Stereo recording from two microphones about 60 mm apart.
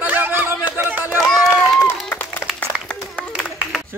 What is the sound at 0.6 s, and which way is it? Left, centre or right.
Music, right.